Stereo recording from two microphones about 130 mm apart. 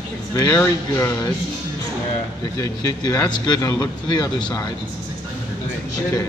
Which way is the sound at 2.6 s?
25° left (ahead or behind).